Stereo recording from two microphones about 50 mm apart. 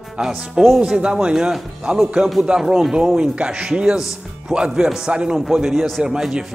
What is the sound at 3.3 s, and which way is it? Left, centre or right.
Speech, right.